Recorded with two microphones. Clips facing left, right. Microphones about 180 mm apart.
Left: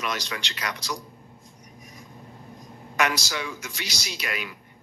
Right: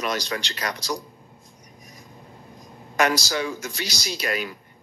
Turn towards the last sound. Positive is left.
turn(degrees=-40)  # may be behind; listen again after turning